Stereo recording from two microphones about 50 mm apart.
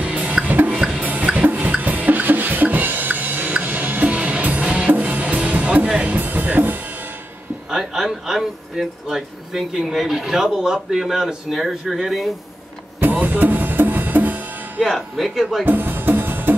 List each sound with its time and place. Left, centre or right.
0.0 s music: right
0.7 s drum: centre
1.0 s music: right
7.7 s speech: centre
13.0 s drum: right
14.8 s speech: centre
15.6 s music: right